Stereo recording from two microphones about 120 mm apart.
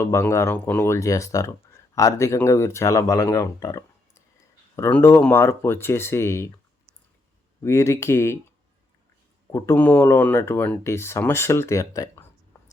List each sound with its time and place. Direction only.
0.0 s speech: 20° left (ahead or behind)
4.8 s speech: 20° left (ahead or behind)
7.6 s speech: 25° left (ahead or behind)
9.5 s speech: 20° left (ahead or behind)